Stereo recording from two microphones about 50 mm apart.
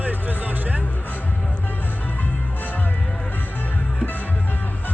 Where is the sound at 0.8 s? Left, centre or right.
Left.